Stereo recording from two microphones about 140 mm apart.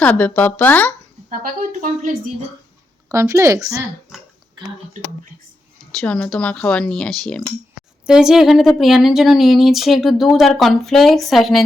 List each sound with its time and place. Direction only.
0.0 s speech: 10° left (ahead or behind)
1.3 s speech: 75° right (ahead or behind)
3.1 s a woman's voice: 20° right (ahead or behind)
6.0 s speech: 10° left (ahead or behind)